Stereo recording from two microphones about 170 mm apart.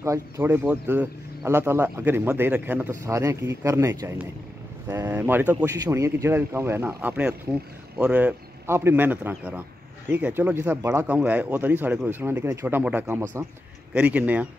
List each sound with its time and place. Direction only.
0.0 s speech: 15° right (ahead or behind)